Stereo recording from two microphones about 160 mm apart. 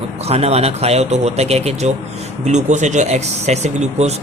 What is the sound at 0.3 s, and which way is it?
Speech, 40° right (ahead or behind).